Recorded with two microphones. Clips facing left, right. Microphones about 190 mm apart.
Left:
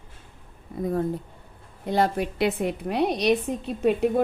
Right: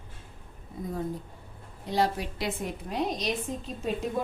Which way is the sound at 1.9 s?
55° left (ahead or behind).